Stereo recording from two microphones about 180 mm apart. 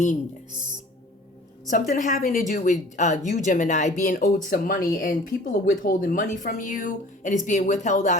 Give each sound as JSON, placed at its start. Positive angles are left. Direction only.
{"t": 1.6, "sound": "speech", "side_deg": 45}